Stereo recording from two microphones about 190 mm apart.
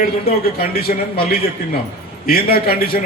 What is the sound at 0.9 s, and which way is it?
Speech, 40° left (ahead or behind).